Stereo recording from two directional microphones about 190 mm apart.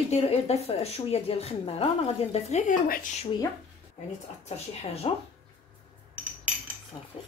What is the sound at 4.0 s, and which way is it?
Speech, 35° left (ahead or behind).